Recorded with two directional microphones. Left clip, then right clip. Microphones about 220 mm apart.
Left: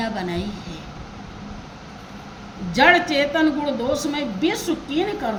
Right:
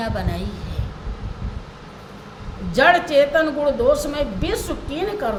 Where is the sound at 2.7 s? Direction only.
20° right (ahead or behind).